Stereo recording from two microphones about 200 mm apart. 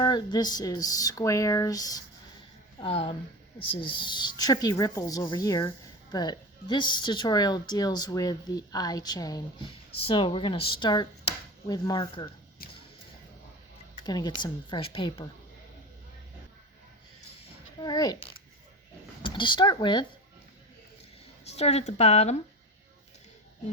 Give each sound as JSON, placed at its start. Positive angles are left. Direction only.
{"t": 0.0, "sound": "speech", "side_deg": 20}
{"t": 2.8, "sound": "speech", "side_deg": 30}
{"t": 14.0, "sound": "speech", "side_deg": 20}
{"t": 17.7, "sound": "speech", "side_deg": 20}
{"t": 21.4, "sound": "a woman's voice", "side_deg": 30}